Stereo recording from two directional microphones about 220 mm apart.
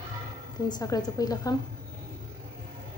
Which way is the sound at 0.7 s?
15° left (ahead or behind).